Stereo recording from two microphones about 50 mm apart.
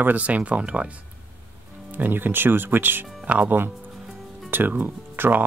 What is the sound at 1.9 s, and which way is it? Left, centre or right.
Speech, right.